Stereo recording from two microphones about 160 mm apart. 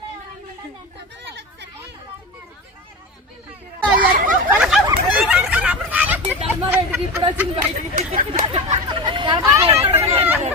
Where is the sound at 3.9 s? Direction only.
55° right (ahead or behind).